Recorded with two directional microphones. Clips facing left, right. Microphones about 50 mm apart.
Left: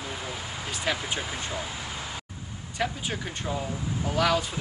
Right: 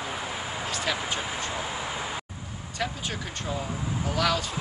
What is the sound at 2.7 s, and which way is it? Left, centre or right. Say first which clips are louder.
Speech: left 2 dB; centre.